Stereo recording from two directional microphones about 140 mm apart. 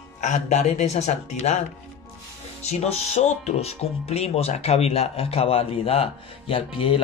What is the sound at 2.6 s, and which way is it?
Speech, 50° left (ahead or behind).